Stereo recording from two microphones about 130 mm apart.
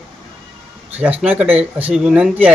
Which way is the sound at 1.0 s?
10° right (ahead or behind).